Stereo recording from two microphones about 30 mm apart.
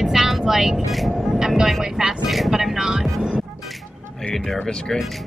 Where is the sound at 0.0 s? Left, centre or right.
Centre.